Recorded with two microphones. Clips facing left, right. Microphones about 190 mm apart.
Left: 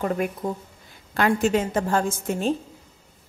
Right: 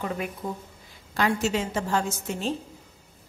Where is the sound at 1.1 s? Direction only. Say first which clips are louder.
Left 4 dB; 55° left (ahead or behind).